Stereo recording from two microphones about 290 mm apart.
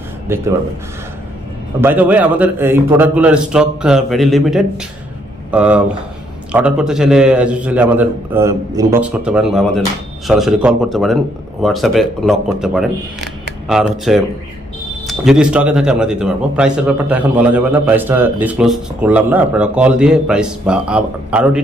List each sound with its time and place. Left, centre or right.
0.3 s speech: centre
1.8 s speech: centre